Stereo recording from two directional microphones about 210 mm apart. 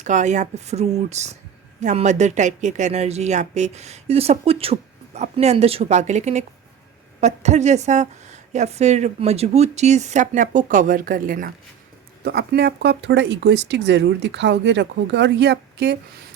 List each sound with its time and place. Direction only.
0.0 s speech: 35° right (ahead or behind); by 16.0 s 55° right (ahead or behind)